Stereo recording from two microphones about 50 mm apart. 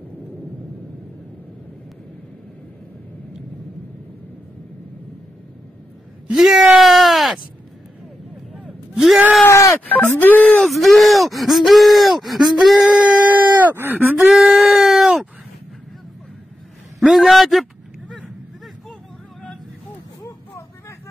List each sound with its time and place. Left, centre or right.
6.3 s a sound: centre
8.9 s gasp: centre
9.8 s speech: left
10.6 s speech: centre
12.8 s groan: right
14.2 s sheep: centre
17.0 s a man's voice: centre